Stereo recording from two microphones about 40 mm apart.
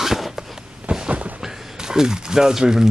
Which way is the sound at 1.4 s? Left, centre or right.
Centre.